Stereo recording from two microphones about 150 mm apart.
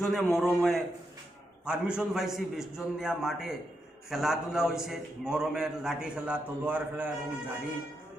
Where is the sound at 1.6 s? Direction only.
5° right (ahead or behind).